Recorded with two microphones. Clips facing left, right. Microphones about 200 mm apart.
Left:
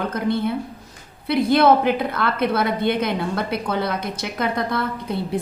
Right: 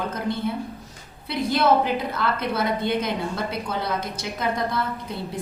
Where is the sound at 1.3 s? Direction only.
60° left (ahead or behind).